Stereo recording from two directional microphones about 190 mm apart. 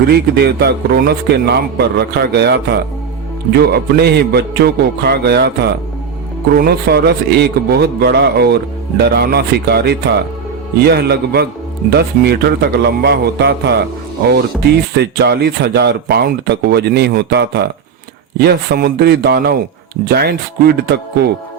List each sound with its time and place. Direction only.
0.1 s a man's voice: 55° right (ahead or behind)
14.9 s a man's voice: 60° right (ahead or behind)